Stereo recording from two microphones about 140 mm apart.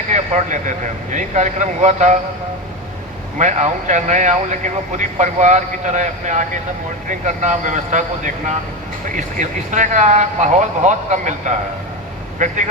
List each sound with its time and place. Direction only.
0.1 s a man's voice: 60° right (ahead or behind)
3.3 s a man's voice: 55° right (ahead or behind)